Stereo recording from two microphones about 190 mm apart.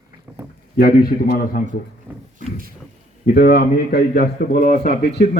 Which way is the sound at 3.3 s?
55° left (ahead or behind).